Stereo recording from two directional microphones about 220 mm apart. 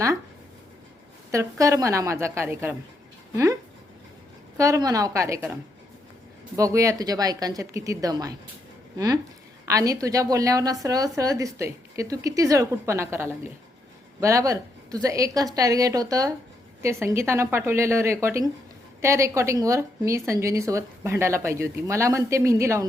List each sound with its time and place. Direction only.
1.3 s a woman's voice: 15° right (ahead or behind)
6.6 s a woman's voice: 15° right (ahead or behind)
9.6 s a woman's voice: 15° right (ahead or behind)